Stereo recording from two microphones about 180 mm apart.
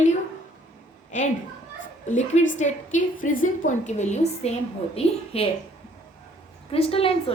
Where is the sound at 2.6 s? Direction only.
45° left (ahead or behind).